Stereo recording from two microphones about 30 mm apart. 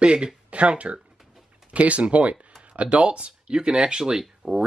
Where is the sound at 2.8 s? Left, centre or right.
Right; by 4.6 s centre.